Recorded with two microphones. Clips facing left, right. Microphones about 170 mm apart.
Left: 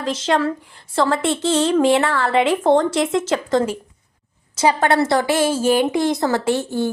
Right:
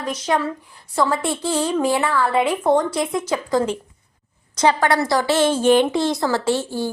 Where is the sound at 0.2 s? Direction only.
90° left.